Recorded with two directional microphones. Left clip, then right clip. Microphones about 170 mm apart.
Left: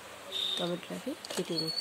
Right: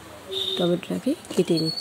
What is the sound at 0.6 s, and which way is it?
Speech, 30° right (ahead or behind).